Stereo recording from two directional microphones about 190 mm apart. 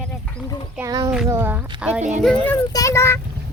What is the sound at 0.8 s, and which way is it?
Speech, 20° right (ahead or behind).